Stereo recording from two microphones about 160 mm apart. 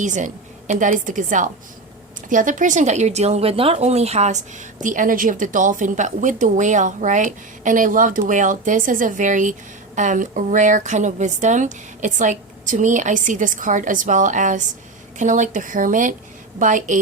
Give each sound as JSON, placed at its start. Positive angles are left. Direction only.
{"t": 0.0, "sound": "speech", "side_deg": -50}